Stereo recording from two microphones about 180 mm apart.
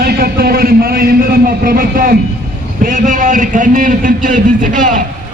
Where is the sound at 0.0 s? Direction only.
60° right (ahead or behind).